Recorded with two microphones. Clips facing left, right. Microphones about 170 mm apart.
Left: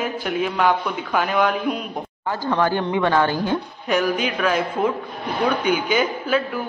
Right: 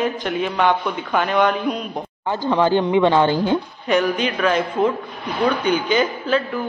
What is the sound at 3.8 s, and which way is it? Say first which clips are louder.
A man's voice: right 2 dB; 5° left (ahead or behind).